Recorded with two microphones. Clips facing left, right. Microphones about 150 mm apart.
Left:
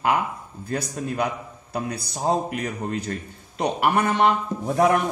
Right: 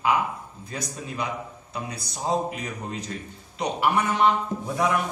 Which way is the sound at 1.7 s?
60° left (ahead or behind).